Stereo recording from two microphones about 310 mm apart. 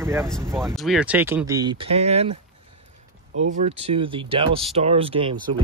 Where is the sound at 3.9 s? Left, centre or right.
Centre.